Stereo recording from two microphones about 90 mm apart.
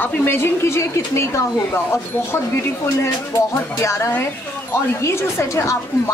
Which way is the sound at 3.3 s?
30° left (ahead or behind).